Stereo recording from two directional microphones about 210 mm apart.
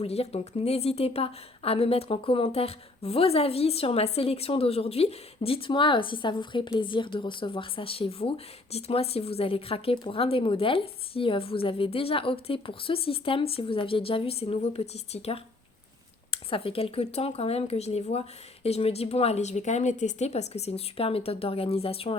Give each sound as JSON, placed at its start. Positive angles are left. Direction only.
{"t": 0.0, "sound": "a woman's voice", "side_deg": 30}